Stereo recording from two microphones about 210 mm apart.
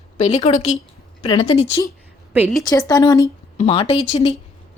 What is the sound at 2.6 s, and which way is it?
A woman's voice, 15° left (ahead or behind).